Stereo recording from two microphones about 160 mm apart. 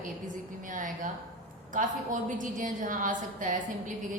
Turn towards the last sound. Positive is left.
turn(degrees=-55)  # may be behind; listen again after turning